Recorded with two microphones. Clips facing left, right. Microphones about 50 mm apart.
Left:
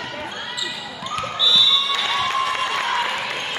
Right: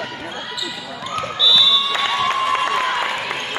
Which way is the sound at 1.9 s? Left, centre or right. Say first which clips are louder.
Right 2 dB; right.